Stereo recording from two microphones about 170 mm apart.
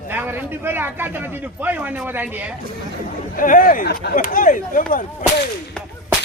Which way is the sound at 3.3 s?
55° left (ahead or behind).